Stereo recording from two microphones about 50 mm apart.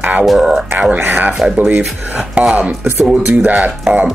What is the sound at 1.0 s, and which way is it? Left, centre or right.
Speech, right.